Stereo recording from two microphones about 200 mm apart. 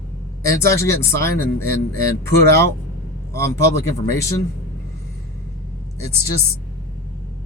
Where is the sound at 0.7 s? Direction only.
15° left (ahead or behind).